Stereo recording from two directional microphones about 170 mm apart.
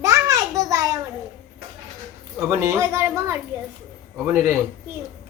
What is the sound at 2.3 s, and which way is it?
Speech, 15° right (ahead or behind).